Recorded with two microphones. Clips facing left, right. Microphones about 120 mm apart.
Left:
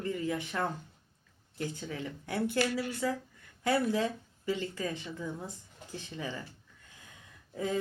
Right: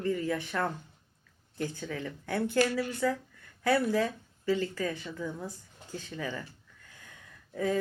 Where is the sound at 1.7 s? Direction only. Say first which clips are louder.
Right 2 dB; 25° left (ahead or behind).